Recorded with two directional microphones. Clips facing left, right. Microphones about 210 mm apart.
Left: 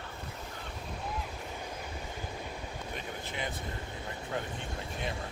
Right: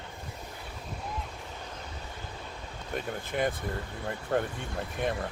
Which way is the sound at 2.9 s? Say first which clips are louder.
Right 10 dB; 45° right (ahead or behind).